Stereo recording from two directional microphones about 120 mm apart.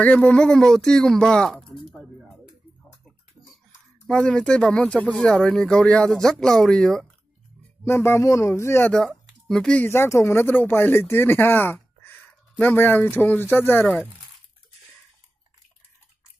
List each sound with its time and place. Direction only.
0.0 s speech: 10° left (ahead or behind)
1.9 s a sound: centre (ahead or behind)
4.1 s speech: 5° left (ahead or behind)
7.8 s speech: 20° left (ahead or behind)
8.9 s speech: 5° left (ahead or behind)
9.8 s speech: 25° left (ahead or behind)